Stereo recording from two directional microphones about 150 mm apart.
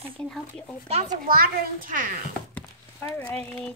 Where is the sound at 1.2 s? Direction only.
75° right (ahead or behind).